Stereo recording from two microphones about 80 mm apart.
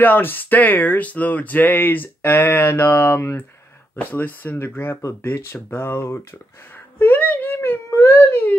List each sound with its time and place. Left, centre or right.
0.0 s speech: left